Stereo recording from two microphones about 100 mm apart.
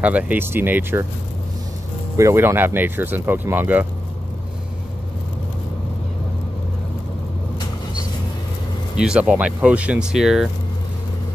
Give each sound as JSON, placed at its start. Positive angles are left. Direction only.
{"t": 0.0, "sound": "speech", "side_deg": -15}
{"t": 2.1, "sound": "speech", "side_deg": -25}
{"t": 8.9, "sound": "speech", "side_deg": -10}